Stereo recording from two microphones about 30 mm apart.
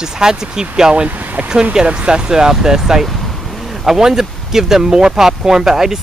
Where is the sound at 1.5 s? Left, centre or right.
Right; by 3.1 s centre.